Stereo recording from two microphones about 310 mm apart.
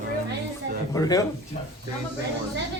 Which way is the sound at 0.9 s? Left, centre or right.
Centre.